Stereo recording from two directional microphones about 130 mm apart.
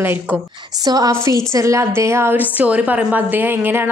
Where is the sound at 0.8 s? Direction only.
30° right (ahead or behind).